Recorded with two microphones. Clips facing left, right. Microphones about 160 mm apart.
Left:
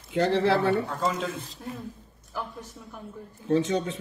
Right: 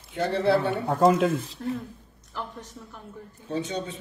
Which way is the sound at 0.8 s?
60° right (ahead or behind).